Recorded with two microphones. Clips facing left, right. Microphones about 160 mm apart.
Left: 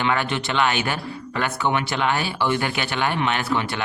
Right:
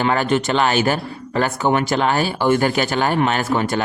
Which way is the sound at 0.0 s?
40° right (ahead or behind).